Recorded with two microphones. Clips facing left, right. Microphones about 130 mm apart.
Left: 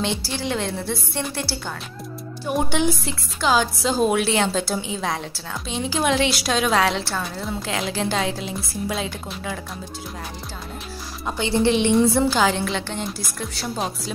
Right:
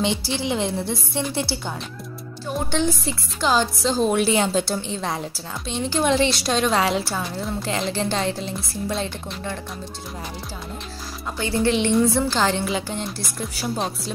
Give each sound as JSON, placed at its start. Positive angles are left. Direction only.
{"t": 0.0, "sound": "a woman's voice", "side_deg": -15}
{"t": 2.4, "sound": "speech", "side_deg": 15}
{"t": 3.1, "sound": "a woman's voice", "side_deg": 0}
{"t": 11.2, "sound": "speech", "side_deg": 20}
{"t": 12.1, "sound": "a woman's voice", "side_deg": 5}